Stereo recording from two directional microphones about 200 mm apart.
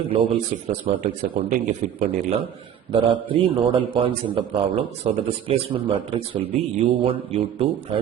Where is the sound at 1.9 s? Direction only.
30° right (ahead or behind).